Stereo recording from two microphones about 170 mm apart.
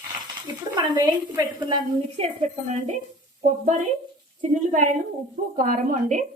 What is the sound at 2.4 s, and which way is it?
Speech, 50° right (ahead or behind).